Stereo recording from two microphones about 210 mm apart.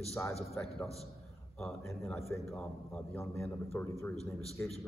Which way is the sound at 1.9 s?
5° left (ahead or behind).